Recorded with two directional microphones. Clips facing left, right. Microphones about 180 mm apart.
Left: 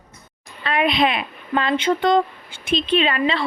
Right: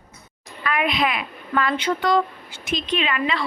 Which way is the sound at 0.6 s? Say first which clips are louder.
Left 3 dB; 30° left (ahead or behind).